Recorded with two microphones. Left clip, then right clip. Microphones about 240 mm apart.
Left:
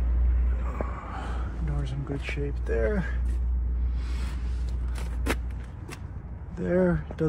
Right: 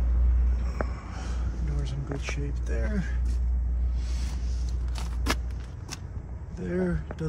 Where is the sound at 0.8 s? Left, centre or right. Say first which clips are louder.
Left 5 dB; centre.